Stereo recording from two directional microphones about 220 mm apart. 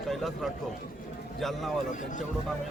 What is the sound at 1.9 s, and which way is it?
Speech, 35° left (ahead or behind).